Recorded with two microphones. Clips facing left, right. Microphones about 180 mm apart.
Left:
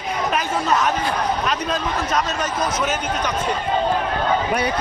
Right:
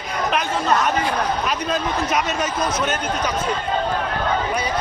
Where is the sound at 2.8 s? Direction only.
Centre (ahead or behind).